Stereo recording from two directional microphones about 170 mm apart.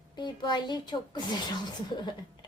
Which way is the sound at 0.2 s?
25° left (ahead or behind).